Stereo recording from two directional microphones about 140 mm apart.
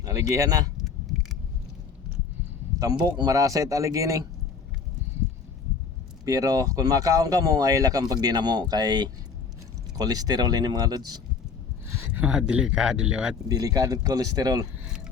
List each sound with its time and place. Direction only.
0.0 s speech: 25° right (ahead or behind)
3.0 s speech: 25° right (ahead or behind)
6.2 s speech: 25° right (ahead or behind)
11.9 s speech: 15° right (ahead or behind)
13.5 s speech: 25° right (ahead or behind)